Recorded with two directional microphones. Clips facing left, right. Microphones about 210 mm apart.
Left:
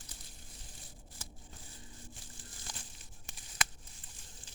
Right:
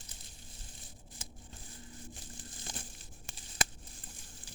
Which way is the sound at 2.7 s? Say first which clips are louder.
Right 5 dB; 25° right (ahead or behind).